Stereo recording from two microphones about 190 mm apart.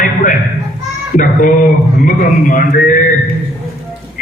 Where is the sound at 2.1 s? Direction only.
45° left (ahead or behind).